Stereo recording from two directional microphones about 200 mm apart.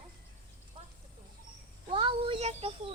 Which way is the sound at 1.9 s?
25° right (ahead or behind).